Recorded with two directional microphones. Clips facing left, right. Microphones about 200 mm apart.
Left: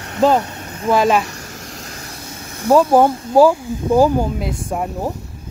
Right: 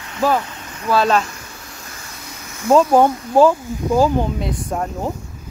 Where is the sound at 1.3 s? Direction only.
40° left (ahead or behind).